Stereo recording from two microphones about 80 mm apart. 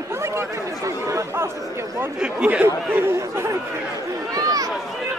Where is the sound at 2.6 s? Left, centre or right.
Right.